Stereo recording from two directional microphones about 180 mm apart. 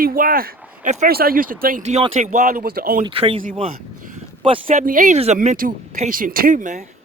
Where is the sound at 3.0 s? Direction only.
30° right (ahead or behind).